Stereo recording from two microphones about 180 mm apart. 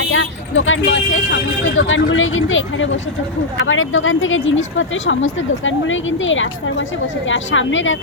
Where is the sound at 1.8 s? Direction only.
90° left.